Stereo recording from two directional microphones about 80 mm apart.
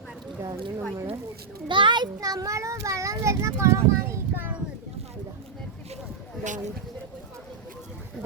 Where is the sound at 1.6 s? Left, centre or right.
Right.